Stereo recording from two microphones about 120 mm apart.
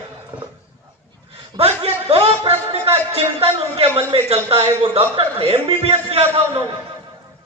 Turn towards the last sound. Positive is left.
turn(degrees=-55)  # may be behind; listen again after turning